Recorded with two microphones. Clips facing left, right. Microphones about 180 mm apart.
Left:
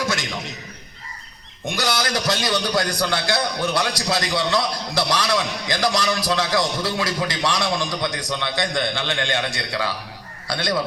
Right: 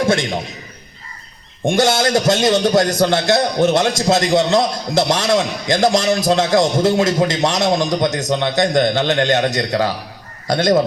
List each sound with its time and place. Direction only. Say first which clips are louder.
0.0 s a man's voice: right 9 dB; 55° right (ahead or behind)
1.6 s a man's voice: right 9 dB; 50° right (ahead or behind)
3.7 s a man's voice: right 8 dB; 25° right (ahead or behind)
3.9 s a man's voice: right 9 dB; 45° right (ahead or behind)